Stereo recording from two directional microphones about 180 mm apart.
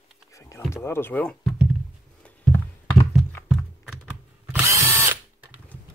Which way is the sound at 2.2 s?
10° left (ahead or behind).